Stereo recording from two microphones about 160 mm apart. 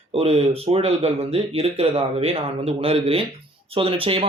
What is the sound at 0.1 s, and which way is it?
Speech, 40° right (ahead or behind).